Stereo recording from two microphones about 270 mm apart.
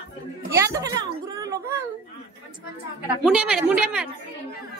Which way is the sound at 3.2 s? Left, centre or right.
Centre.